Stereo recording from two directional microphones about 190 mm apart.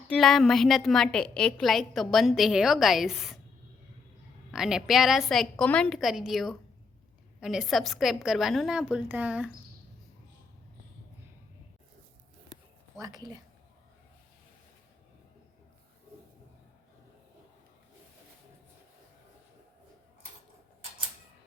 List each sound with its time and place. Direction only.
0.1 s a woman's voice: centre (ahead or behind)
4.5 s a woman's voice: 5° right (ahead or behind)
13.0 s a woman's voice: 20° right (ahead or behind)